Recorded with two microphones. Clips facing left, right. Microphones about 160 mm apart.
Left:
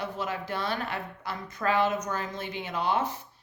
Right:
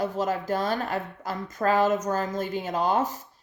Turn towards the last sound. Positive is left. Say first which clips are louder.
# right 4 dB
turn(degrees=-40)  # may be behind; listen again after turning